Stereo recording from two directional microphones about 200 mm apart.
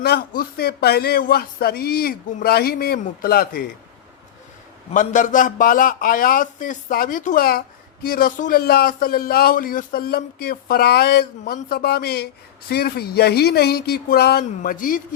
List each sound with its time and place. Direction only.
0.0 s a man's voice: 50° left (ahead or behind)
4.9 s a man's voice: 40° left (ahead or behind)